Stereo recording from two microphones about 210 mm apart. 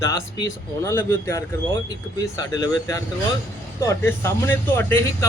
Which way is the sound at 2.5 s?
15° left (ahead or behind).